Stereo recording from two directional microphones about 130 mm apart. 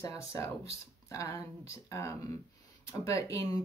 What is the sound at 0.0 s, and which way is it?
Speech, 25° left (ahead or behind).